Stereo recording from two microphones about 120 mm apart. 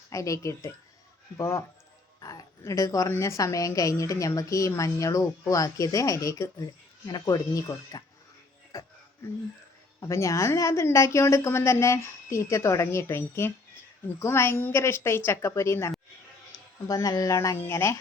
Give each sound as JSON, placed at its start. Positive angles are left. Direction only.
{"t": 0.1, "sound": "a woman's voice", "side_deg": 25}
{"t": 10.0, "sound": "a woman's voice", "side_deg": 25}